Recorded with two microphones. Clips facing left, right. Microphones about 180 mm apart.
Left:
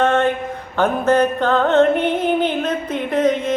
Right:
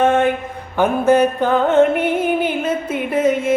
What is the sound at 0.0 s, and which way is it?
Mantra, 10° right (ahead or behind).